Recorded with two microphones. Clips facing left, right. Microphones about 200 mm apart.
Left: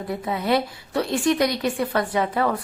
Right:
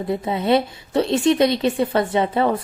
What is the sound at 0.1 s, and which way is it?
A woman's voice, 25° right (ahead or behind).